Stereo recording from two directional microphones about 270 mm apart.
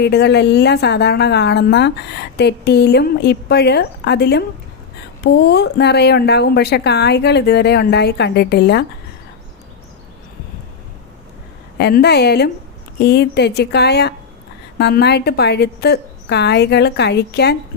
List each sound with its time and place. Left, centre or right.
0.0 s a woman's voice: left
11.8 s a woman's voice: left